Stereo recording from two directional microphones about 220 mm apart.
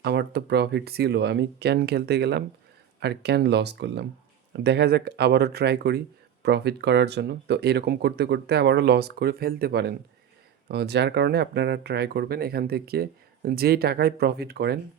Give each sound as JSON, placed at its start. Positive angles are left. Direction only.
{"t": 0.0, "sound": "speech", "side_deg": -50}